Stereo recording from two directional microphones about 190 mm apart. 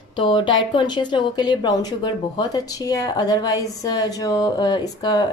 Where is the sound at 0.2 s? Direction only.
25° left (ahead or behind).